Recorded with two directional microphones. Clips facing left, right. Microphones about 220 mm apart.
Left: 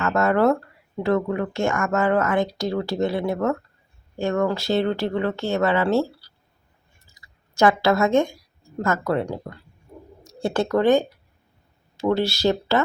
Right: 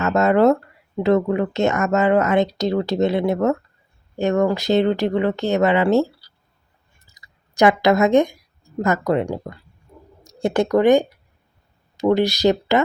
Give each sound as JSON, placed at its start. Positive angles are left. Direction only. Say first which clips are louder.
{"t": 0.0, "sound": "speech", "louder": "right 4 dB", "side_deg": -20}